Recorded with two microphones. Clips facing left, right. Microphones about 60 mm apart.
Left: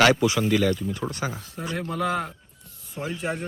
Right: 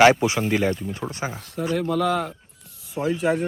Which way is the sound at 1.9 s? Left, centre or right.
Centre.